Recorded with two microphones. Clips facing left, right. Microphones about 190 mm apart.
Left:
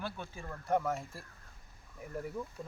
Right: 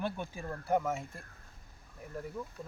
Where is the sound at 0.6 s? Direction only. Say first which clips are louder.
Even; 5° right (ahead or behind).